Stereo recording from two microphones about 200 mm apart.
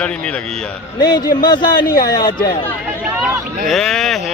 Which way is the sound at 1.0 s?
20° left (ahead or behind).